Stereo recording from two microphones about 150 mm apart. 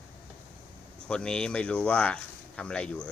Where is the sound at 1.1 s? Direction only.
5° left (ahead or behind).